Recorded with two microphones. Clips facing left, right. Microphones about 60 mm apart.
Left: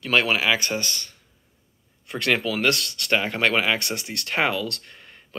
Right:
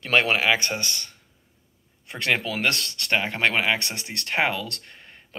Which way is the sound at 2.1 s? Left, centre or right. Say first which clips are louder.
Left 2 dB; right.